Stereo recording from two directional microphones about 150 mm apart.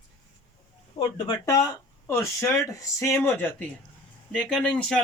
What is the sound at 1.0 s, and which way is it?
Speech, 35° left (ahead or behind).